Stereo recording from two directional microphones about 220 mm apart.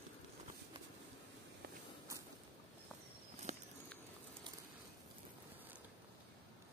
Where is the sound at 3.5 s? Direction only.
30° right (ahead or behind).